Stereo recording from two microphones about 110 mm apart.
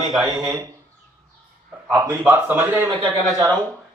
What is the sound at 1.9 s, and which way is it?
Speech, 25° right (ahead or behind).